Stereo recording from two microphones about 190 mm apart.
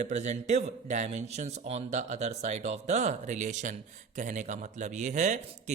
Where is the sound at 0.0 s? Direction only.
40° right (ahead or behind).